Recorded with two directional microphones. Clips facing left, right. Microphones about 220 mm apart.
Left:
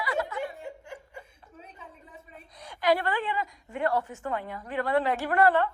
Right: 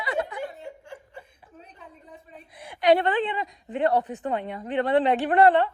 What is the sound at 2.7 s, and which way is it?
A woman's voice, 20° right (ahead or behind).